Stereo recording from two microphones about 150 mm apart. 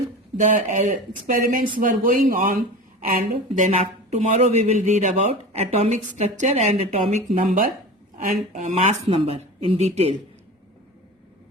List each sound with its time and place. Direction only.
0.3 s speech: 55° right (ahead or behind)
3.7 s speech: 50° right (ahead or behind)